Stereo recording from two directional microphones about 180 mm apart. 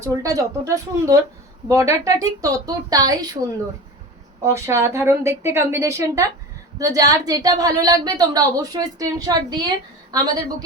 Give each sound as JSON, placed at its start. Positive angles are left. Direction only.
{"t": 0.0, "sound": "a woman's voice", "side_deg": -15}
{"t": 4.4, "sound": "a woman's voice", "side_deg": -15}